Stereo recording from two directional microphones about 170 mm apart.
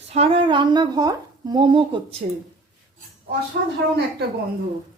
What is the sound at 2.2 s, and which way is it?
Speech, 45° right (ahead or behind).